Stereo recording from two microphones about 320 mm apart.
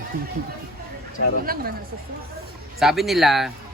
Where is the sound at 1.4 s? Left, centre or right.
Right.